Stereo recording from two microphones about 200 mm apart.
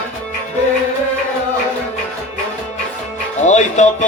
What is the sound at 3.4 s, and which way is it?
Music, 35° left (ahead or behind).